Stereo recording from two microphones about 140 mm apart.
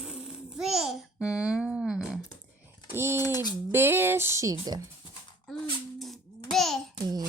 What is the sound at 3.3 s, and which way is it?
Speech, 30° left (ahead or behind).